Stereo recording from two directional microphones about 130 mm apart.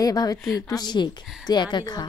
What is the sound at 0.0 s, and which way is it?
A woman's voice, 30° left (ahead or behind).